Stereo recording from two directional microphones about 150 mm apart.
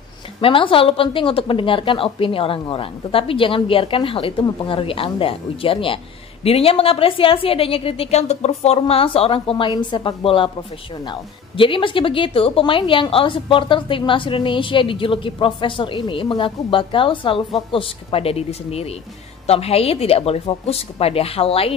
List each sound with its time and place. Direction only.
0.4 s a woman's voice: 35° left (ahead or behind)